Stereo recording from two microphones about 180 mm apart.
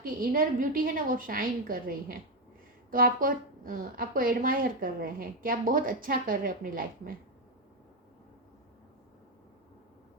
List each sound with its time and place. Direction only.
0.0 s speech: 50° right (ahead or behind)